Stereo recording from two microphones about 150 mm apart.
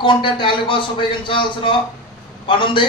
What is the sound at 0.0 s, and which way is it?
A man's voice, 35° left (ahead or behind).